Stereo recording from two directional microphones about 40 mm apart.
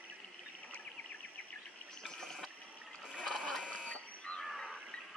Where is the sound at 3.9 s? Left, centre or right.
Left.